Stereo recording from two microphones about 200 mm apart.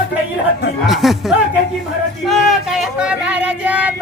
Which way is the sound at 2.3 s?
Centre (ahead or behind).